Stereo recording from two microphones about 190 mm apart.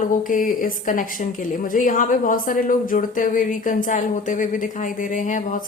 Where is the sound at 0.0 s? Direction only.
45° left (ahead or behind).